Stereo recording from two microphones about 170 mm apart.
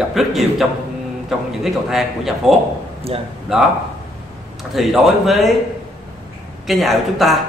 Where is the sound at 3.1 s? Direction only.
35° right (ahead or behind).